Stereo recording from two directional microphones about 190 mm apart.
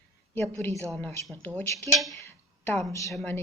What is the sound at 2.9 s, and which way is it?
Speech, 15° left (ahead or behind).